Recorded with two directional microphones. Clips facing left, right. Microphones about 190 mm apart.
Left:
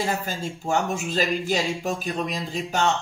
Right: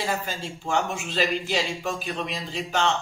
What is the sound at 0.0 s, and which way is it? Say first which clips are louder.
Speech: left 2 dB; 45° left (ahead or behind).